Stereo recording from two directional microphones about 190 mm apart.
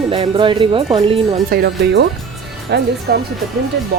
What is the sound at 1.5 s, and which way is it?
Speech, 55° right (ahead or behind).